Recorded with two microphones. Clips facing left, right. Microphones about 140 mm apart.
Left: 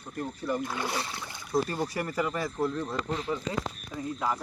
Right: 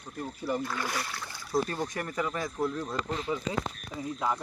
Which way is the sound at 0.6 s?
20° left (ahead or behind).